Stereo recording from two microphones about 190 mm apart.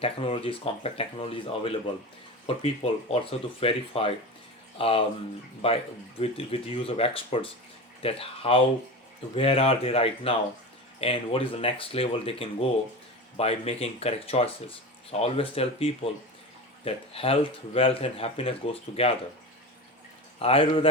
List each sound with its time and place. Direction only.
0.0 s speech: 30° left (ahead or behind)
20.4 s speech: 30° left (ahead or behind)